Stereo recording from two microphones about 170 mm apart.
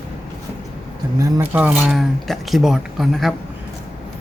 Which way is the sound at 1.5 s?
10° right (ahead or behind).